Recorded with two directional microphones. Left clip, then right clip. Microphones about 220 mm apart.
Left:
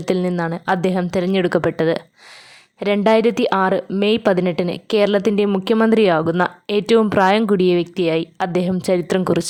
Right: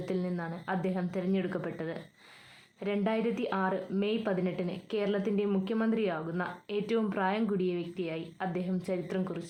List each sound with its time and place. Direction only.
0.0 s a woman's voice: 45° left (ahead or behind)